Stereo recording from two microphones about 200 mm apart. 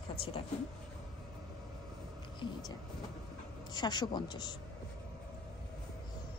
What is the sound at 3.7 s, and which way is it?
Speech, 20° left (ahead or behind).